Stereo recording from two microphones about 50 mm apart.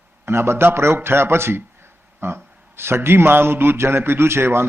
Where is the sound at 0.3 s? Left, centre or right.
Right.